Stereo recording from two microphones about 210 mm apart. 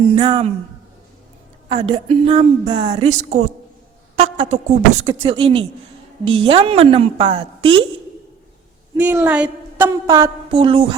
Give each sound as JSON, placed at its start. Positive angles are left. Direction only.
{"t": 0.2, "sound": "a woman's voice", "side_deg": -25}
{"t": 1.7, "sound": "a woman's voice", "side_deg": -25}
{"t": 2.9, "sound": "a woman's voice", "side_deg": -35}
{"t": 9.0, "sound": "a woman's voice", "side_deg": -10}